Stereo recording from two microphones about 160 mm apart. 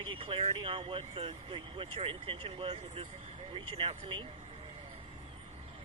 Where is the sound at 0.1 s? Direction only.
35° right (ahead or behind).